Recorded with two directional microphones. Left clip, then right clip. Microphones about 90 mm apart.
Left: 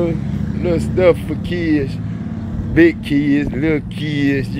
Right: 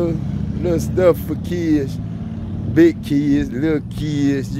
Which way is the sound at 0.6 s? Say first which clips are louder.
Left 2 dB; 45° right (ahead or behind).